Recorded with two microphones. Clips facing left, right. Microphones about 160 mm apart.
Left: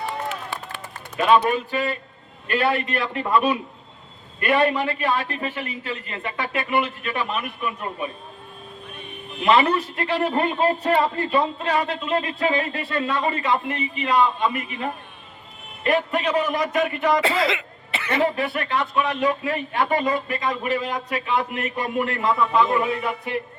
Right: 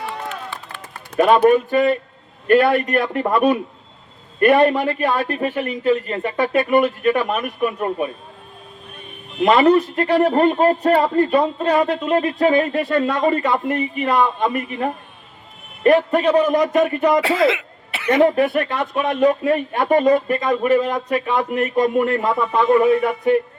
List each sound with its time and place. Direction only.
1.2 s a man's voice: 50° right (ahead or behind)
9.4 s a man's voice: 45° right (ahead or behind)
18.2 s a man's voice: 45° right (ahead or behind)